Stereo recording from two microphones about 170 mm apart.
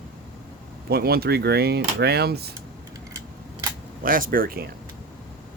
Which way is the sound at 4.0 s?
55° right (ahead or behind).